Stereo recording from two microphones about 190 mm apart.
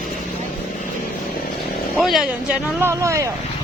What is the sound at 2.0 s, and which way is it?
Speech, centre (ahead or behind).